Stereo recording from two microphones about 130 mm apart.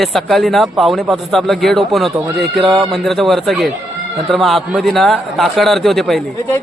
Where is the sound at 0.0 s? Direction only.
Centre (ahead or behind).